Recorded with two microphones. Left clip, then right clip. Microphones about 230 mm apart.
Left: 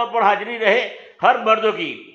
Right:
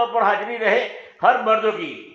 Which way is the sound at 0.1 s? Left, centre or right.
Left.